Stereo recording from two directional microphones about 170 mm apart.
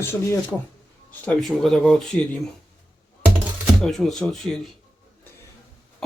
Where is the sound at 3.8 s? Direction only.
Centre (ahead or behind).